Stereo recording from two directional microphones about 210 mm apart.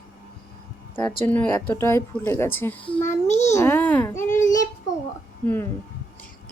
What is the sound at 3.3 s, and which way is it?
Speech, 30° left (ahead or behind).